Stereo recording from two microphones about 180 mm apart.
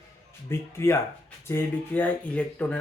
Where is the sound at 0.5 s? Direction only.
15° left (ahead or behind).